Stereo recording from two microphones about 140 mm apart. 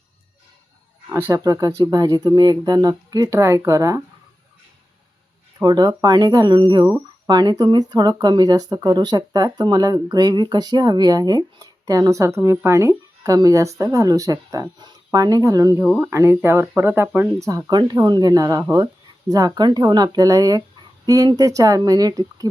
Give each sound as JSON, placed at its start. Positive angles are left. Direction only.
{"t": 1.1, "sound": "speech", "side_deg": -20}
{"t": 5.5, "sound": "speech", "side_deg": -30}
{"t": 17.7, "sound": "speech", "side_deg": -30}